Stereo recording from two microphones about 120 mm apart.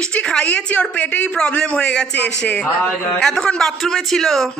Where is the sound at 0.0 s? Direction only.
10° left (ahead or behind).